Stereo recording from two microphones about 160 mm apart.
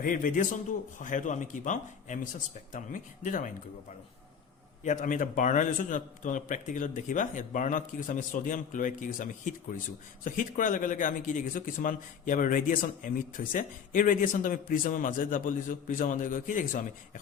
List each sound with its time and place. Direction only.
0.0 s a man's voice: 60° left (ahead or behind)
4.8 s a man's voice: 50° left (ahead or behind)